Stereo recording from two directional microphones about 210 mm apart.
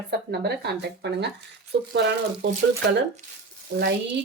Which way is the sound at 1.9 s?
55° right (ahead or behind).